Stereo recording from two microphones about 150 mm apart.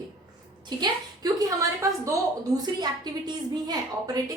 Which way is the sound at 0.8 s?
25° right (ahead or behind).